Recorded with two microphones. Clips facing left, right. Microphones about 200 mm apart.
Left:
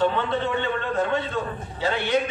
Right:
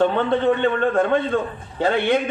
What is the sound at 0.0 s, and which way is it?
A man's voice, 55° right (ahead or behind).